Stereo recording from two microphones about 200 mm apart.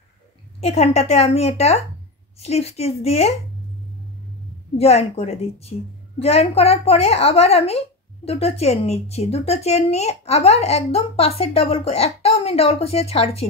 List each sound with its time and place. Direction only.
0.6 s a woman's voice: 30° left (ahead or behind)
4.7 s a woman's voice: 30° left (ahead or behind)